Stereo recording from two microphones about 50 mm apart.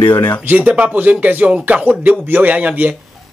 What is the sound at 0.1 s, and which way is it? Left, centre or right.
Speech, left.